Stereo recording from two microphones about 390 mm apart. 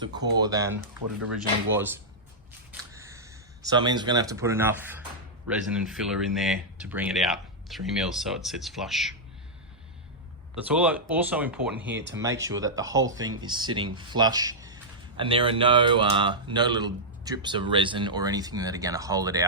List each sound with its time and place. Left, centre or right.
0.0 s speech: centre
2.9 s a sound: centre
5.5 s speech: centre
10.5 s speech: centre
11.9 s speech: right
12.2 s speech: centre